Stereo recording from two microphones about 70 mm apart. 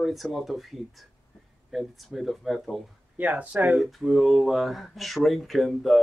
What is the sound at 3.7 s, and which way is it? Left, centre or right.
Speech, centre.